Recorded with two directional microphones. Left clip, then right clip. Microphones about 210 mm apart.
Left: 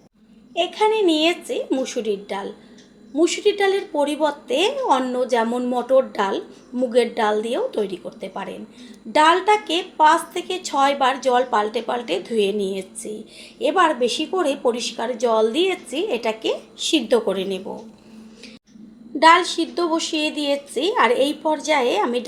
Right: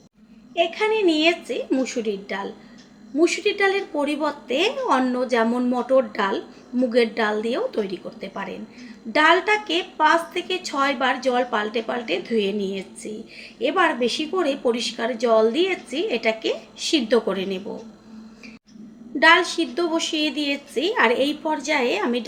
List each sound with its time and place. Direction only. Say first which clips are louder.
0.5 s a woman's voice: left 2 dB; 25° left (ahead or behind)
19.2 s a woman's voice: left 2 dB; 25° left (ahead or behind)